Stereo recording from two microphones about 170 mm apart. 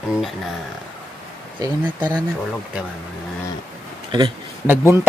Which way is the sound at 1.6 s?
20° right (ahead or behind).